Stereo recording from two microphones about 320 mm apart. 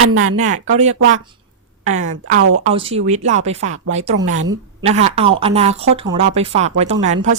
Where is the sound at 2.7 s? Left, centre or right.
Centre.